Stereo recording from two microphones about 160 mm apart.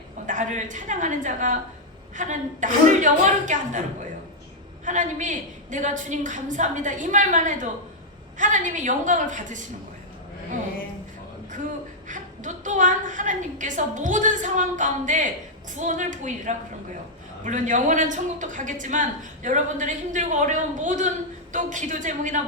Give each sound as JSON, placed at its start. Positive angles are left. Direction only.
{"t": 0.3, "sound": "speech", "side_deg": -50}
{"t": 4.9, "sound": "speech", "side_deg": -50}
{"t": 12.0, "sound": "speech", "side_deg": -50}